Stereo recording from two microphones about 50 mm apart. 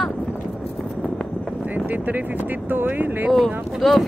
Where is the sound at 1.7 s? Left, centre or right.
Right.